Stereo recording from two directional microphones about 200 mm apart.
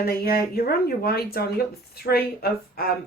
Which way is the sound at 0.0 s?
50° left (ahead or behind).